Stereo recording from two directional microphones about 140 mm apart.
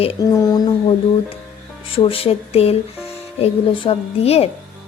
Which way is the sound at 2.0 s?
40° left (ahead or behind).